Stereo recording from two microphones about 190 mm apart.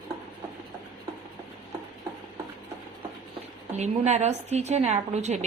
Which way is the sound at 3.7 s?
35° right (ahead or behind).